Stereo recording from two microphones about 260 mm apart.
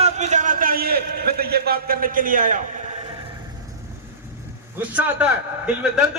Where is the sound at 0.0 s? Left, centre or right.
Right.